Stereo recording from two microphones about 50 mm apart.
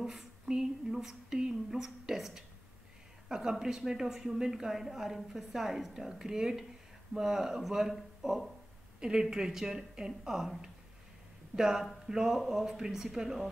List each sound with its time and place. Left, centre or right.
0.5 s a woman's voice: centre
9.0 s a woman's voice: centre